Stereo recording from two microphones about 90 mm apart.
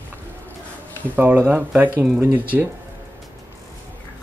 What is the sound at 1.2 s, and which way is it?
Speech, 20° right (ahead or behind).